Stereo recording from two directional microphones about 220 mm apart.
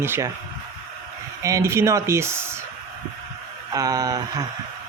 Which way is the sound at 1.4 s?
15° right (ahead or behind).